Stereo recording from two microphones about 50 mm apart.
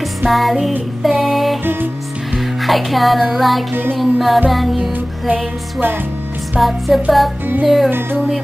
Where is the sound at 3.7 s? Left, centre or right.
Right.